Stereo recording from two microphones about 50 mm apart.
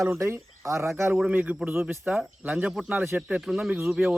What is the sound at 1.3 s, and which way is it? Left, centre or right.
Speech, right.